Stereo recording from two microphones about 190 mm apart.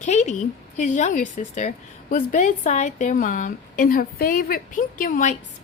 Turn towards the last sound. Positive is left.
turn(degrees=40)  # may be behind; listen again after turning